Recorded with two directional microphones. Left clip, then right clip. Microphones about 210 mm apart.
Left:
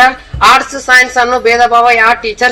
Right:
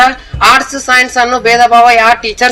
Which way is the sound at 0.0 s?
50° right (ahead or behind).